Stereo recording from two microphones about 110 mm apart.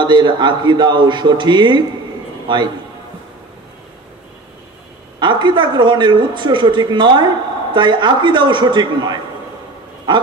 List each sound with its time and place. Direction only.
0.0 s a man's voice: 45° right (ahead or behind)
5.2 s speech: 45° right (ahead or behind)